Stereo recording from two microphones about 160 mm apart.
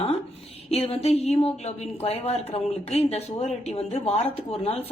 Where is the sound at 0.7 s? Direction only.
40° left (ahead or behind).